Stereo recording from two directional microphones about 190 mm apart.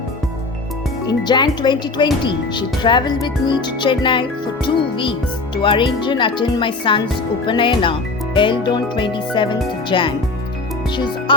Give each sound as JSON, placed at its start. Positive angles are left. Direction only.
{"t": 1.0, "sound": "speech", "side_deg": 25}